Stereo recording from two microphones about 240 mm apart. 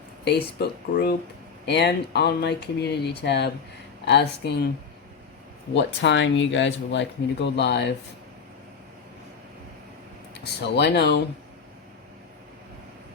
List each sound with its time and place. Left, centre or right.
0.6 s speech: left
5.7 s speech: left
10.4 s speech: left